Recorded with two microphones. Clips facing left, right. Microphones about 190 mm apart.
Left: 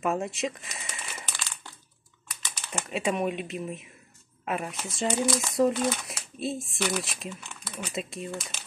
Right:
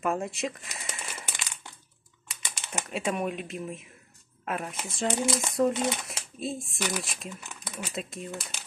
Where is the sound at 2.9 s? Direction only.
Centre (ahead or behind).